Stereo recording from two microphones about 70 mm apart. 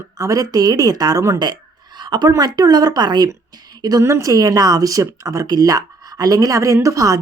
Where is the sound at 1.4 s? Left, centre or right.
Right.